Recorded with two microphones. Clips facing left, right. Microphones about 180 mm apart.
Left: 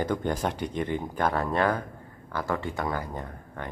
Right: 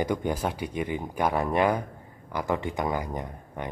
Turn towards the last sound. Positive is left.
turn(degrees=-15)  # may be behind; listen again after turning